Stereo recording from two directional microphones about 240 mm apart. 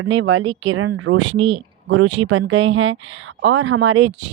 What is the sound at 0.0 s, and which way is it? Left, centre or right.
Speech, right.